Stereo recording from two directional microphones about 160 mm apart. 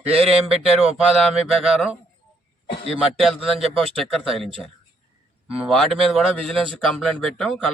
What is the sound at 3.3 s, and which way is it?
Speech, 5° right (ahead or behind).